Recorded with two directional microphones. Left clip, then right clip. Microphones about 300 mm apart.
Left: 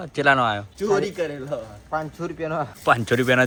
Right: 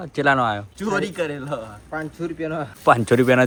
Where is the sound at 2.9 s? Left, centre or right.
Centre.